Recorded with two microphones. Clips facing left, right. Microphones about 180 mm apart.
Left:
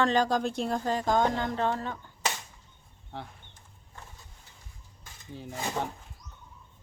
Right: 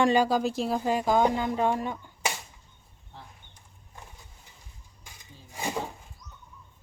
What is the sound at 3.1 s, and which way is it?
Speech, 70° left (ahead or behind).